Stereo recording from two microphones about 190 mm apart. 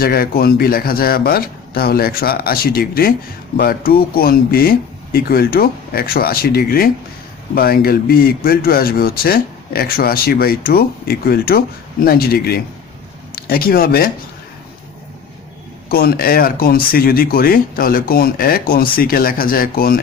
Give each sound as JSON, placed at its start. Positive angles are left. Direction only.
{"t": 0.0, "sound": "speech", "side_deg": 55}
{"t": 15.9, "sound": "speech", "side_deg": 50}